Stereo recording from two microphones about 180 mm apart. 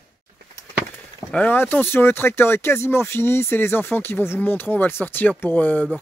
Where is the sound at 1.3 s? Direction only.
10° left (ahead or behind).